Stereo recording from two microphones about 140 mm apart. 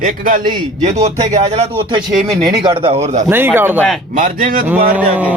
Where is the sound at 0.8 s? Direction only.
50° right (ahead or behind).